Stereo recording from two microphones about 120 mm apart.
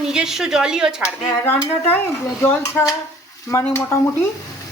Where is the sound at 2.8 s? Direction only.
10° left (ahead or behind).